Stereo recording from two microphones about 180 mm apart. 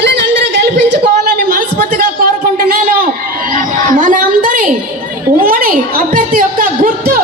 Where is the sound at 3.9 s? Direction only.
45° right (ahead or behind).